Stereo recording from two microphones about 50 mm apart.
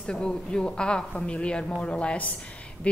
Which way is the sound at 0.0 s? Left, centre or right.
Centre.